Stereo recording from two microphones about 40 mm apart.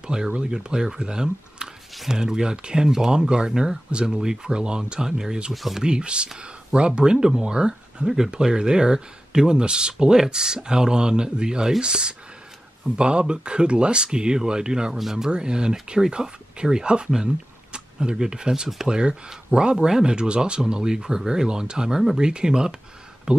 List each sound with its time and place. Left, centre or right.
0.0 s speech: right
5.5 s speech: centre
5.8 s speech: right
15.0 s speech: centre
15.2 s speech: right